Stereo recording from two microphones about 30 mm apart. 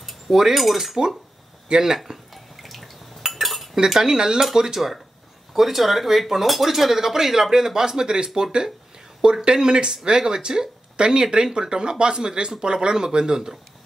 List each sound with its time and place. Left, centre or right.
0.0 s cutlery: centre
0.6 s speech: centre
1.7 s speech: right
2.3 s water: centre
3.3 s cutlery: centre
3.7 s speech: centre
5.5 s speech: centre